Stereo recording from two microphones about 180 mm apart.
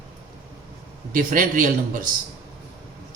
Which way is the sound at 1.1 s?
50° right (ahead or behind).